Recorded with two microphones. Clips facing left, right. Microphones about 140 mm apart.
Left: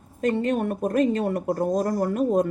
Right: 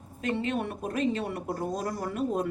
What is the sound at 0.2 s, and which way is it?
Speech, 45° left (ahead or behind).